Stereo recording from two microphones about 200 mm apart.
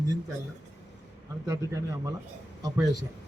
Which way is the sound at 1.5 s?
15° right (ahead or behind).